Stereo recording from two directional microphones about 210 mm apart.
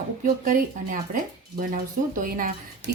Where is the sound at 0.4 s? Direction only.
40° right (ahead or behind).